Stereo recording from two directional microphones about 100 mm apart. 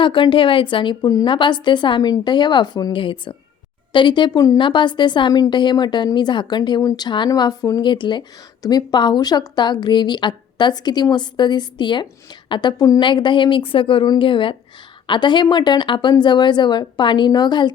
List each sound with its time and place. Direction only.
0.0 s speech: 55° left (ahead or behind)
2.9 s speech: 60° left (ahead or behind)